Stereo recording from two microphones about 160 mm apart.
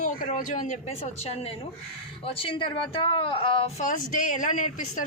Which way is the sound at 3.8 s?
50° left (ahead or behind).